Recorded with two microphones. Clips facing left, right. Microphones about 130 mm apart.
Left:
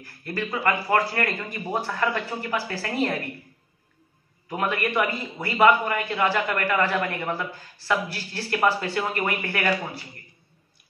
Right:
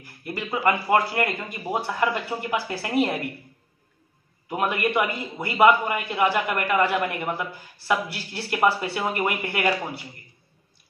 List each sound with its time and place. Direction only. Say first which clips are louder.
0.0 s a sound: left 2 dB; 15° right (ahead or behind)
0.6 s a man's voice: right 2 dB; 15° right (ahead or behind)
4.5 s a man's voice: right 2 dB; 15° right (ahead or behind)